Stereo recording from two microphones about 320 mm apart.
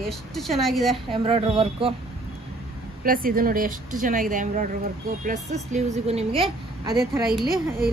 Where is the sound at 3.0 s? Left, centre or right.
Right.